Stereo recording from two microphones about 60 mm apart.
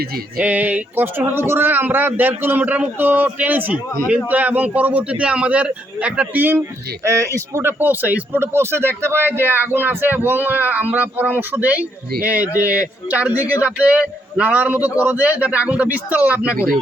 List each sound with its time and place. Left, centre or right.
0.3 s a man's voice: right
6.3 s speech: right
6.6 s speech: right
8.5 s a man's voice: right